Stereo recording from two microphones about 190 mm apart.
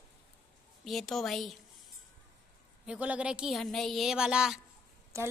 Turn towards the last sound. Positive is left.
turn(degrees=-15)  # may be behind; listen again after turning